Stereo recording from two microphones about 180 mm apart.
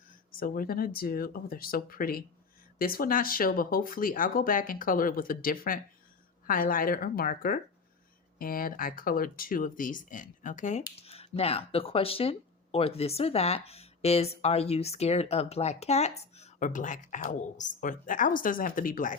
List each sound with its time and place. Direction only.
0.3 s speech: 50° left (ahead or behind)
11.0 s a sound: 35° left (ahead or behind)
11.3 s speech: 35° left (ahead or behind); by 19.1 s 50° left (ahead or behind)